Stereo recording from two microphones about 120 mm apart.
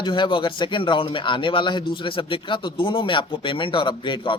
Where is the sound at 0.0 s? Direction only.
45° left (ahead or behind).